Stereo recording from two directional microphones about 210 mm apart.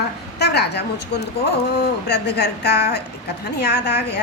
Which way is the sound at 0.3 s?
50° left (ahead or behind).